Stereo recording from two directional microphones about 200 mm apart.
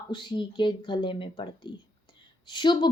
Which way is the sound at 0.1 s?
25° left (ahead or behind).